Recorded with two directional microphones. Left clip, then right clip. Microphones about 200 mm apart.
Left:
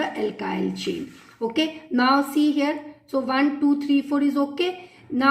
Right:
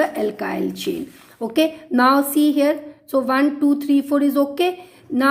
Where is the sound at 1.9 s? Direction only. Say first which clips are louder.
Right 3 dB; 40° right (ahead or behind).